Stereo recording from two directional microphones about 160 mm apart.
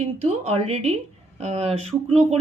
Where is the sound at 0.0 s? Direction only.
40° right (ahead or behind).